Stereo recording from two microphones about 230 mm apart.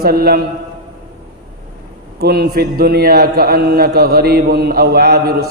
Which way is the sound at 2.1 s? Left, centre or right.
Right.